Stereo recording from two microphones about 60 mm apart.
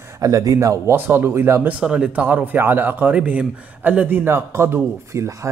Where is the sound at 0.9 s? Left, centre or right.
Right.